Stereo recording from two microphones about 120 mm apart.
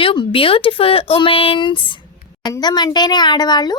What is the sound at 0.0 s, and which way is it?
A woman's voice, 45° left (ahead or behind).